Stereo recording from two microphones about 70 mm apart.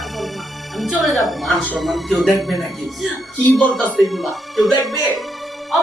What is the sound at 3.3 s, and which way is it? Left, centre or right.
Speech, left.